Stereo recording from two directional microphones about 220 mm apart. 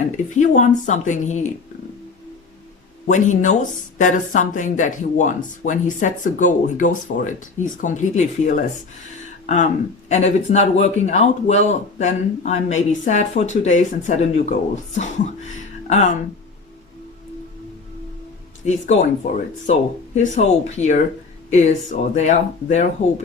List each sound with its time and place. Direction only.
0.3 s speech: 35° left (ahead or behind)
3.1 s speech: 35° left (ahead or behind)
10.1 s speech: 30° left (ahead or behind)
15.5 s music: 35° left (ahead or behind)
18.6 s speech: 30° left (ahead or behind)